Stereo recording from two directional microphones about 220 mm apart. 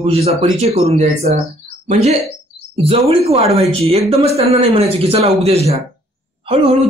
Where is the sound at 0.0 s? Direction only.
25° right (ahead or behind).